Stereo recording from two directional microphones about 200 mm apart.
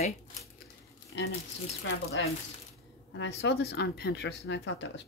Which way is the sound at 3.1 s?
65° left (ahead or behind).